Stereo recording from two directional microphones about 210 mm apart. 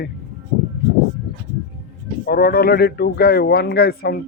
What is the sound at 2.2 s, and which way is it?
A man's voice, 45° left (ahead or behind).